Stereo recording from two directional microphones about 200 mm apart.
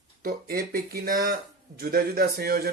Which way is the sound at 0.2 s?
50° right (ahead or behind).